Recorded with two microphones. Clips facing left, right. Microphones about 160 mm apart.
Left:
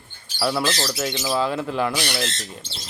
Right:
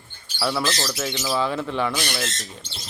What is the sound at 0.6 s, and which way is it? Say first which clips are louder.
Speech: left 1 dB; 20° left (ahead or behind).